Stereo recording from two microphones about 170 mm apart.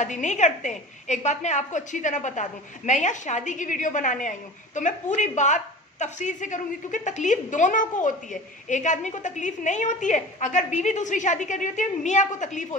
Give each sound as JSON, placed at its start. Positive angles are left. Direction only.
{"t": 0.0, "sound": "a woman's voice", "side_deg": 45}